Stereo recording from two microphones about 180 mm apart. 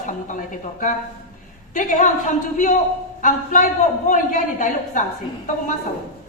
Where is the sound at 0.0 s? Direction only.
45° left (ahead or behind).